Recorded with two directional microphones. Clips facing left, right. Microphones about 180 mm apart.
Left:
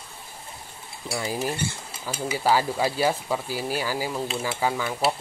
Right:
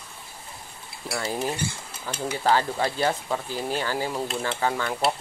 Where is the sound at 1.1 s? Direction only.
15° left (ahead or behind).